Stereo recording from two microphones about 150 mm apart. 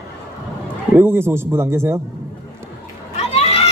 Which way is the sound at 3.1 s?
45° left (ahead or behind).